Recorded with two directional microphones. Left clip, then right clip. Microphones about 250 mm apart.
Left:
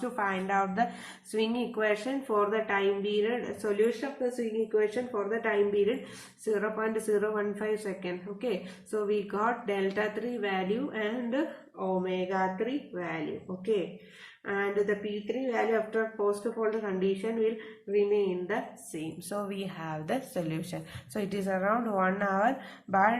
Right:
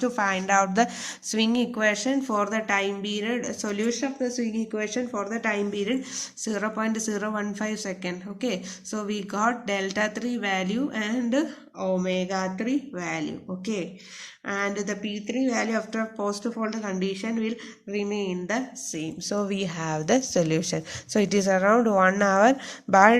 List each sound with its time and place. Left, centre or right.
0.0 s speech: right
14.4 s speech: right